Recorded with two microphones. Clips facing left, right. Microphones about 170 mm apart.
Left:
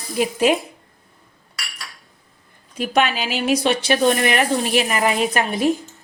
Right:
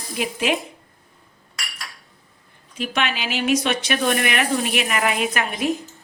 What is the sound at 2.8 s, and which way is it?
A woman's voice, 40° left (ahead or behind).